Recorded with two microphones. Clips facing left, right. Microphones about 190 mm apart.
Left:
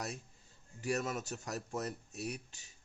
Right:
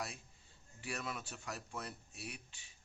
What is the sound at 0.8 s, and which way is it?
A man's voice, 40° left (ahead or behind).